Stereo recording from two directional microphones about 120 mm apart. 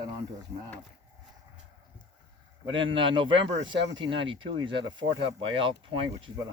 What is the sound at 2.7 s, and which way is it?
Speech, 45° right (ahead or behind).